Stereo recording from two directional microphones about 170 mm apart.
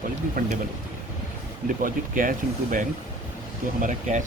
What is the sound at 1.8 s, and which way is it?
Speech, 55° right (ahead or behind).